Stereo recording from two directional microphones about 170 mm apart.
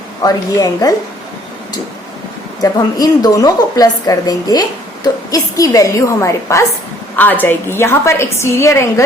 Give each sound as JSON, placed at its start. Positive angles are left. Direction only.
{"t": 0.2, "sound": "a woman's voice", "side_deg": 20}
{"t": 2.6, "sound": "a woman's voice", "side_deg": 20}